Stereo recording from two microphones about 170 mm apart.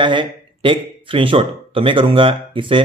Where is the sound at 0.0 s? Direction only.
30° right (ahead or behind).